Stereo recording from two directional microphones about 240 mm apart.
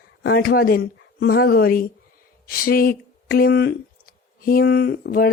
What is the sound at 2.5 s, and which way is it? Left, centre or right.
Speech, left.